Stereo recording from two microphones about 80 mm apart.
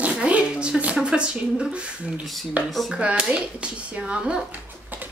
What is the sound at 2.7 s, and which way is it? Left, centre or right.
Speech, centre.